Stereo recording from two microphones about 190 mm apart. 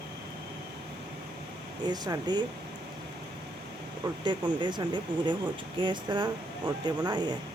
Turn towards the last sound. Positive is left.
turn(degrees=-20)  # may be behind; listen again after turning